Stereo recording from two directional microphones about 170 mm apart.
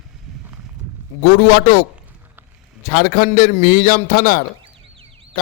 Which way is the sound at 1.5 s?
55° left (ahead or behind).